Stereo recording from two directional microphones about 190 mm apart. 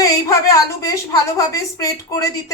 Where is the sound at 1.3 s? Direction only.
15° left (ahead or behind).